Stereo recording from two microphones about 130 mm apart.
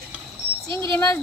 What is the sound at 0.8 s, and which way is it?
Speech, 25° left (ahead or behind).